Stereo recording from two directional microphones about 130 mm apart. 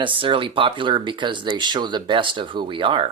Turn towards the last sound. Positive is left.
turn(degrees=-40)  # may be behind; listen again after turning